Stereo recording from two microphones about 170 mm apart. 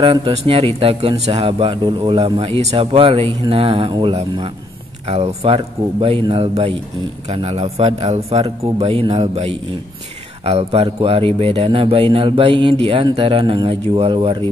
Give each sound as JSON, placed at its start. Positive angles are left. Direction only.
{"t": 0.0, "sound": "a man's voice", "side_deg": -30}